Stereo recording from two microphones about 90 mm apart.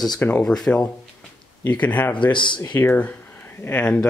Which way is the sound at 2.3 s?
60° left (ahead or behind).